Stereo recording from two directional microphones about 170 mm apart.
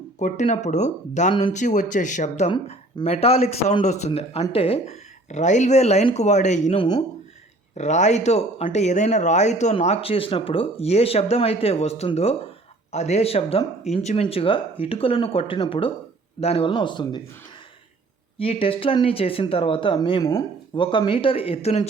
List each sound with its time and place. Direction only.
0.2 s speech: 50° left (ahead or behind)
6.7 s speech: 30° left (ahead or behind)
7.8 s speech: 45° left (ahead or behind); by 17.2 s 25° left (ahead or behind)
18.3 s speech: 35° left (ahead or behind)